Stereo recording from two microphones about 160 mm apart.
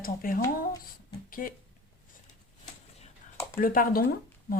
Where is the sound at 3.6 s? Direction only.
60° left (ahead or behind).